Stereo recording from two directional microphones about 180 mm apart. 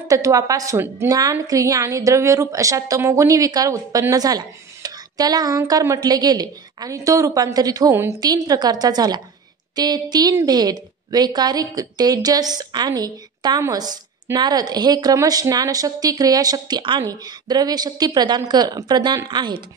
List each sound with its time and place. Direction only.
0.1 s a woman's voice: 20° right (ahead or behind)